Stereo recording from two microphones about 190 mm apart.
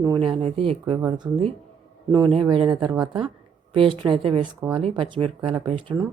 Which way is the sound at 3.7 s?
25° right (ahead or behind).